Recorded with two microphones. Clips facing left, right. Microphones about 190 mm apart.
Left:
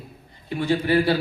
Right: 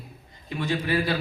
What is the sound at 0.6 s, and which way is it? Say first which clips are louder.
Speech: left 5 dB; 30° left (ahead or behind).